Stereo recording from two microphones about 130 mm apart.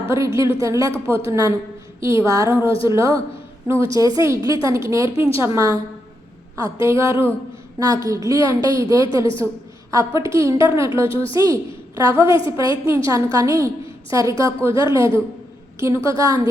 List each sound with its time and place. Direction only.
0.0 s a woman's voice: 20° right (ahead or behind)
11.1 s a woman's voice: 45° left (ahead or behind)
11.3 s a woman's voice: 25° right (ahead or behind)